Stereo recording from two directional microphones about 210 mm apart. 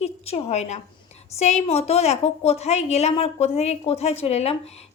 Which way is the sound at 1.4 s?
30° left (ahead or behind).